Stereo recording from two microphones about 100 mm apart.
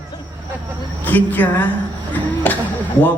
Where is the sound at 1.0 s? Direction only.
20° left (ahead or behind).